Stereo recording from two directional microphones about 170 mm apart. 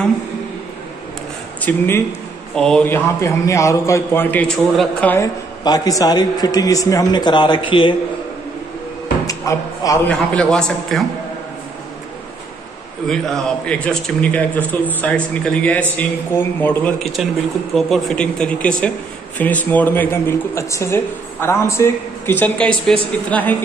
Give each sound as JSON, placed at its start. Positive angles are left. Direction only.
{"t": 1.6, "sound": "speech", "side_deg": 10}
{"t": 5.6, "sound": "a man's voice", "side_deg": 20}
{"t": 9.2, "sound": "a man's voice", "side_deg": 20}
{"t": 10.3, "sound": "speech", "side_deg": 5}
{"t": 13.0, "sound": "speech", "side_deg": 5}